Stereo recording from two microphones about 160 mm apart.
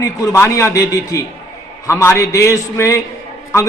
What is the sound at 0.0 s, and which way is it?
A man's voice, 15° left (ahead or behind).